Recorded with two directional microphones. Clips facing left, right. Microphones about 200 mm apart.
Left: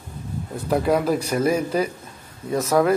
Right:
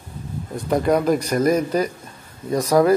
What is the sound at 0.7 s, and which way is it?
A man's voice, 5° left (ahead or behind).